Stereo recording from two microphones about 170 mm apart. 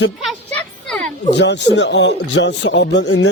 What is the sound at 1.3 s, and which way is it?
A man's voice, 90° left.